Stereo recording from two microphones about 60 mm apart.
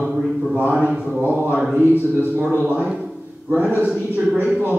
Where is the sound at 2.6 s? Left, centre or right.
Right.